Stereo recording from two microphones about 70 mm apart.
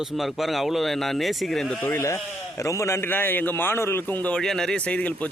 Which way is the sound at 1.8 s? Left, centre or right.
Left.